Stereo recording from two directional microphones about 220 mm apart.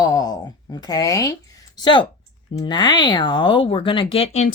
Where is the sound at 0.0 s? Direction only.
15° left (ahead or behind).